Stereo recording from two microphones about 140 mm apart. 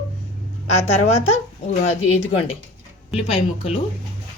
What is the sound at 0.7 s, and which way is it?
Speech, 50° left (ahead or behind).